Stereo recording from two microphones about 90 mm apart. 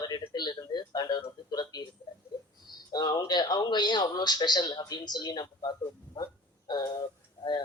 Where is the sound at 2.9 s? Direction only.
50° left (ahead or behind).